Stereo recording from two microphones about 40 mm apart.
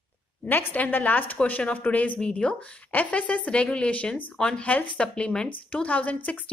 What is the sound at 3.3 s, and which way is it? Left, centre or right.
Speech, left.